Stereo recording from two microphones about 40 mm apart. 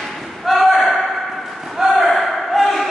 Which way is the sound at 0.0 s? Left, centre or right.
Centre.